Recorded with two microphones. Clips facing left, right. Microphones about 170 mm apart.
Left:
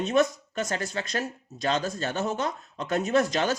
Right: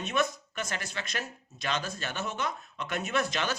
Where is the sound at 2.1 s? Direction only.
35° left (ahead or behind).